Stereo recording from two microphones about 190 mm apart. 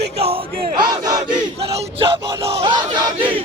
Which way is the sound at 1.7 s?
30° right (ahead or behind).